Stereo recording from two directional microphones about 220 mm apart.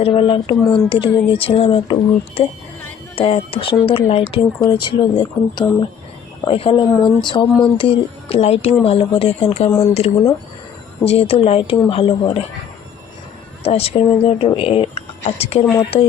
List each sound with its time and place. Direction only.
0.0 s speech: 25° left (ahead or behind)
13.7 s speech: 25° left (ahead or behind)